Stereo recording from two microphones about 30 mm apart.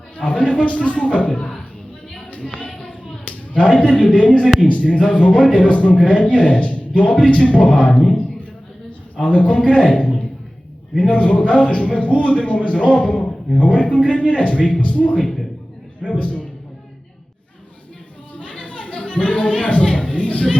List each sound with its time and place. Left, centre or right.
0.2 s a man's voice: left
3.2 s a man's voice: left
7.7 s a man's voice: left
9.1 s a man's voice: left
10.0 s a sound: centre
11.3 s a man's voice: left
13.1 s a man's voice: left
18.3 s music: left